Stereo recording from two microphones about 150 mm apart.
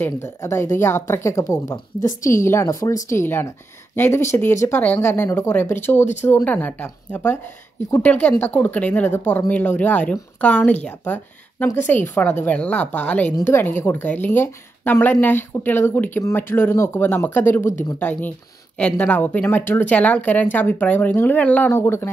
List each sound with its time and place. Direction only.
0.0 s a woman's voice: 15° left (ahead or behind)